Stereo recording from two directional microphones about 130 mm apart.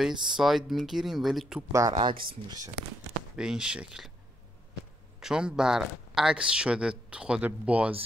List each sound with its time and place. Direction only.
0.3 s speech: centre (ahead or behind)
1.7 s speech: 25° right (ahead or behind)
3.3 s speech: 5° right (ahead or behind)
5.2 s speech: 5° right (ahead or behind)